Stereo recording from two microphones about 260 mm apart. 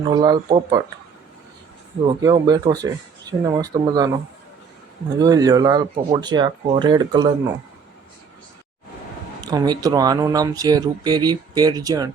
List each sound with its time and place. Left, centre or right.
0.0 s speech: centre
2.2 s speech: centre
5.2 s speech: centre
9.4 s speech: centre